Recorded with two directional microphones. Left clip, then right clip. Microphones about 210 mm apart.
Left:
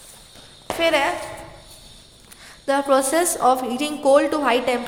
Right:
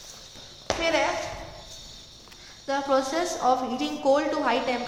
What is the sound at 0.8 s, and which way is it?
Speech, 50° left (ahead or behind).